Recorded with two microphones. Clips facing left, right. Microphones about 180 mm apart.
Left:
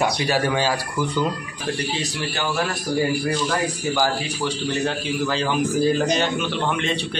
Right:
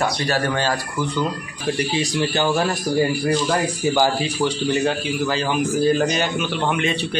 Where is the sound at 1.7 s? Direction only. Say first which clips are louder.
Right 4 dB; 10° right (ahead or behind).